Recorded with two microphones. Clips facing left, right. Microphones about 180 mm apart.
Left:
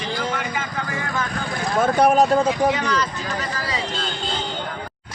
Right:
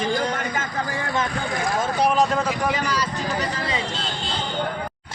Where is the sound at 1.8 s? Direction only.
50° left (ahead or behind).